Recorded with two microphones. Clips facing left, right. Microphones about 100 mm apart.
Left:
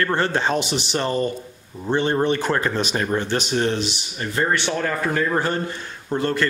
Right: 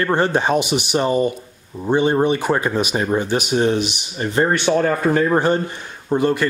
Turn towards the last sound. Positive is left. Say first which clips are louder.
# right 4 dB
turn(degrees=-15)  # may be behind; listen again after turning